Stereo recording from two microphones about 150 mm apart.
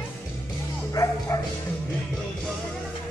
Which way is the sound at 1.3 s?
20° left (ahead or behind).